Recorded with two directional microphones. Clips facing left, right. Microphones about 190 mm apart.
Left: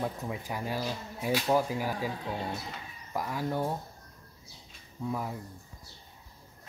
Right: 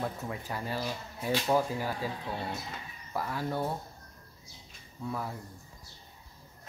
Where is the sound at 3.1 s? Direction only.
15° left (ahead or behind).